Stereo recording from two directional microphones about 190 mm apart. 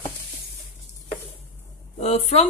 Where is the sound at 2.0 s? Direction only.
35° left (ahead or behind).